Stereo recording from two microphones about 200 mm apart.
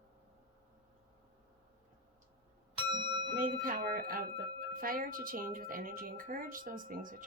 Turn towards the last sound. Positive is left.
turn(degrees=-40)  # may be behind; listen again after turning